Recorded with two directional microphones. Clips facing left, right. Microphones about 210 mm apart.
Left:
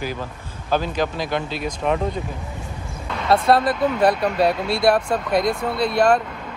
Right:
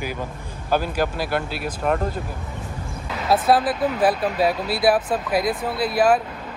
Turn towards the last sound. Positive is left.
turn(degrees=-5)  # may be behind; listen again after turning